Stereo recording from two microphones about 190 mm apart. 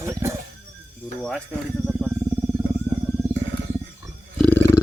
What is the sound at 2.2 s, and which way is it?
Wild animals, 15° right (ahead or behind).